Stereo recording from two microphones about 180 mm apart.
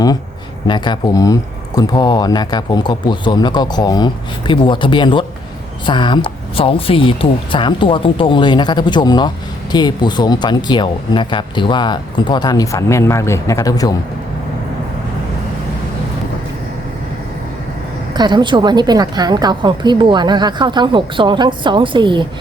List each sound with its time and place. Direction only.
0.7 s speech: 20° left (ahead or behind)
18.1 s a woman's voice: 25° right (ahead or behind)